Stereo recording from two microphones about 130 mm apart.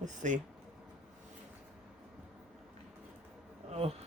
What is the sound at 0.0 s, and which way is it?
Speech, 70° right (ahead or behind).